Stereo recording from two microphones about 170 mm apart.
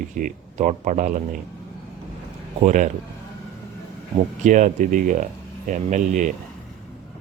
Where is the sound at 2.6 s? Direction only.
45° right (ahead or behind).